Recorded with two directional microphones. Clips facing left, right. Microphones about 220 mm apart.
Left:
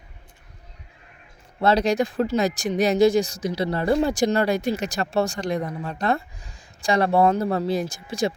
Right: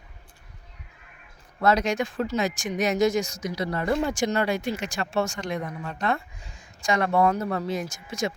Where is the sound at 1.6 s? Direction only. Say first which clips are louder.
Left 3 dB; 30° left (ahead or behind).